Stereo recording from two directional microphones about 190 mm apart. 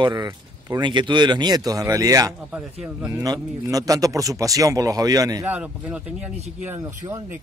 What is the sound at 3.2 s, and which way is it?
Speech, 20° right (ahead or behind).